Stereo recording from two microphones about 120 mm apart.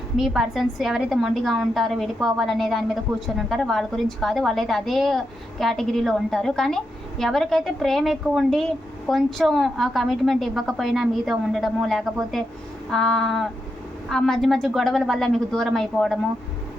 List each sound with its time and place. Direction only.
0.2 s a woman's voice: 5° right (ahead or behind)